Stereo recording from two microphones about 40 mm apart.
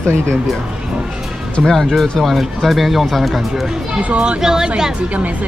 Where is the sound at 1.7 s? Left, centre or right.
Centre.